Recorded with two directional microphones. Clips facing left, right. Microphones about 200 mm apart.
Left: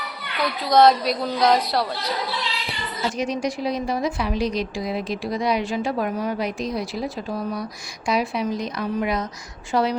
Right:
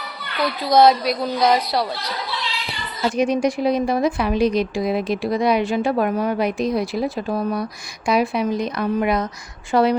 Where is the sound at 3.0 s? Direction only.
55° right (ahead or behind).